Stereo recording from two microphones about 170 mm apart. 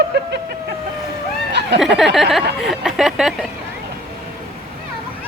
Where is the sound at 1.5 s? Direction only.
85° right.